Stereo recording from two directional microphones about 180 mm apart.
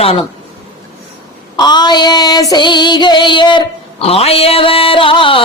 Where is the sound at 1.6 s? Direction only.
25° left (ahead or behind).